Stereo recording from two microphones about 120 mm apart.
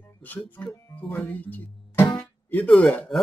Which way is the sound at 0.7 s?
20° left (ahead or behind).